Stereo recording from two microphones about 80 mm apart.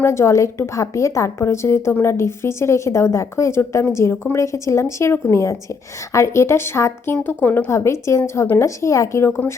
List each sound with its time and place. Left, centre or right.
0.0 s a woman's voice: left